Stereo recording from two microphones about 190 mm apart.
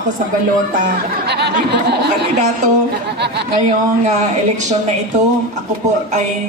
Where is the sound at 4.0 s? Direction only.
40° right (ahead or behind).